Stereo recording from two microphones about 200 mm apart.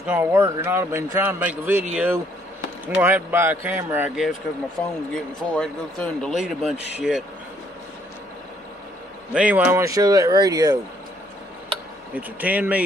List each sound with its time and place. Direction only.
0.0 s a man's voice: 10° right (ahead or behind)
9.3 s a man's voice: 5° right (ahead or behind)
12.2 s a man's voice: 10° right (ahead or behind)